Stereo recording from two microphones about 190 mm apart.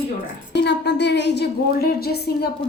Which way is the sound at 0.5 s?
65° left (ahead or behind).